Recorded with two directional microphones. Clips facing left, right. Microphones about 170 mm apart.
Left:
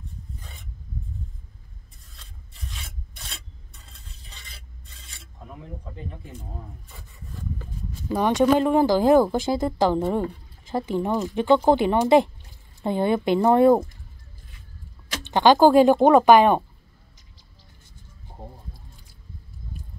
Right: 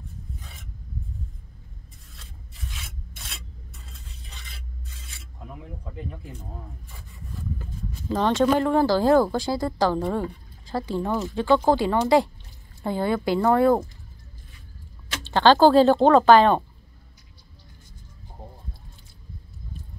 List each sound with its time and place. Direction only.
0.4 s filing: centre (ahead or behind)
2.1 s filing: centre (ahead or behind)
8.1 s speech: 15° left (ahead or behind)
15.2 s speech: 15° left (ahead or behind)